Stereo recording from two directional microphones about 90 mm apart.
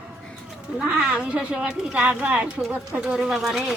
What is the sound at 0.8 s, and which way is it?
Speech, 10° right (ahead or behind).